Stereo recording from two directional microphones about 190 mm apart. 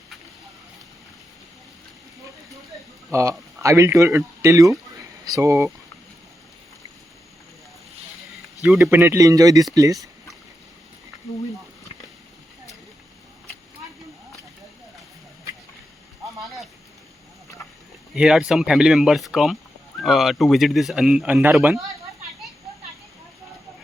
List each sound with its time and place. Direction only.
3.1 s speech: 15° right (ahead or behind)
8.6 s speech: 5° right (ahead or behind)
18.1 s speech: centre (ahead or behind)